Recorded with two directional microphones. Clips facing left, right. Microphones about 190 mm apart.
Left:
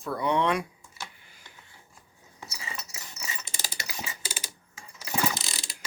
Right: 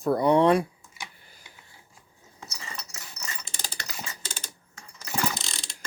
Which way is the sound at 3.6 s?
5° left (ahead or behind).